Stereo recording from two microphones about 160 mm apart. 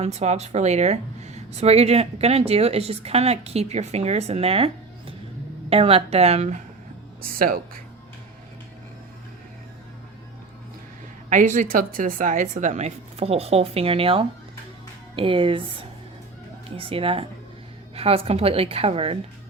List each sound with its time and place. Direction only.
0.0 s a woman's voice: 45° right (ahead or behind)
7.3 s speech: 65° right (ahead or behind)
11.3 s a woman's voice: 55° right (ahead or behind); by 19.2 s 35° right (ahead or behind)